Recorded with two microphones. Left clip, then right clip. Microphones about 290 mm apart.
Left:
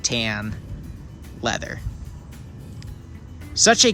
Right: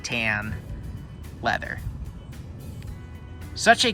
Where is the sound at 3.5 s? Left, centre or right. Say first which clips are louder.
Left 3 dB; centre.